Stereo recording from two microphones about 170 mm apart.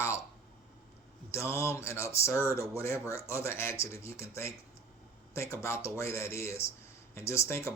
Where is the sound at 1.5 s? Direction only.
15° left (ahead or behind).